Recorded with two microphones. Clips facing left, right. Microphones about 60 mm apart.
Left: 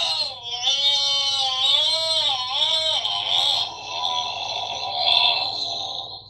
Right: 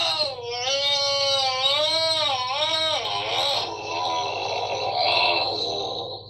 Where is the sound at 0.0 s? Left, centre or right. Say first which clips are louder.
Right 3 dB; right.